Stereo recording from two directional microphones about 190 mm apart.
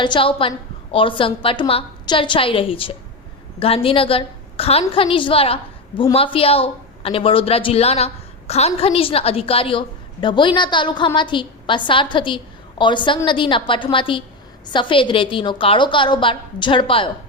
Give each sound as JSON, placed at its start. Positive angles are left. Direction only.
{"t": 0.0, "sound": "speech", "side_deg": 25}